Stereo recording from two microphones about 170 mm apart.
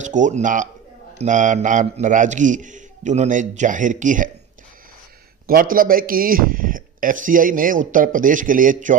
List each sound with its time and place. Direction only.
0.0 s a man's voice: 45° right (ahead or behind)
5.5 s a man's voice: 55° right (ahead or behind)